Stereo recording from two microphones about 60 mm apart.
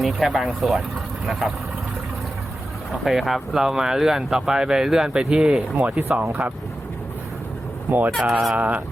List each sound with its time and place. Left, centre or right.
0.0 s speech: centre
2.9 s speech: centre
5.7 s speech: right
7.9 s speech: right
8.2 s speech: centre
8.5 s a sound: right